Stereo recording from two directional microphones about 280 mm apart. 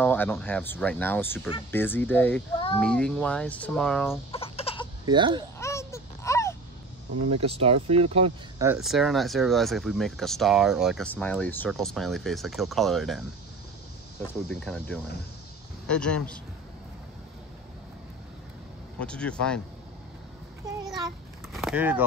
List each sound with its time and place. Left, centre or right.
0.0 s speech: centre
4.3 s chicken: centre
5.0 s speech: centre
5.6 s a sound: centre
7.2 s speech: right
8.6 s speech: centre
14.2 s speech: centre
18.9 s speech: centre
21.5 s a sound: centre